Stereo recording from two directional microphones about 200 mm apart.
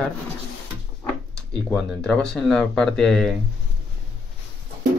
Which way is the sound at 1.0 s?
5° left (ahead or behind).